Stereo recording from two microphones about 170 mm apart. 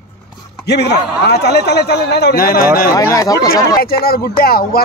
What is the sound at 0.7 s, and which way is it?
Speech, 75° left (ahead or behind).